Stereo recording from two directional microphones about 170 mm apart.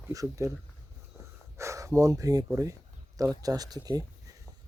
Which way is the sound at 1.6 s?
15° right (ahead or behind).